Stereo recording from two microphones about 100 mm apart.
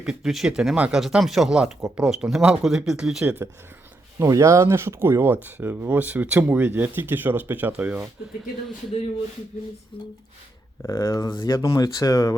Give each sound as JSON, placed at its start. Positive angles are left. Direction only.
{"t": 0.0, "sound": "speech", "side_deg": -5}
{"t": 3.2, "sound": "speech", "side_deg": -20}
{"t": 9.9, "sound": "speech", "side_deg": 60}
{"t": 10.8, "sound": "speech", "side_deg": 30}
{"t": 11.3, "sound": "speech", "side_deg": 50}
{"t": 11.7, "sound": "speech", "side_deg": 40}